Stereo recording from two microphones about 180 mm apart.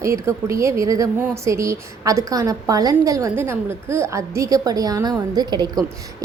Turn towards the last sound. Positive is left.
turn(degrees=-20)  # may be behind; listen again after turning